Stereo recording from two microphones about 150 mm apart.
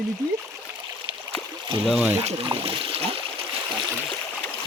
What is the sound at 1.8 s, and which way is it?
Speech, centre (ahead or behind).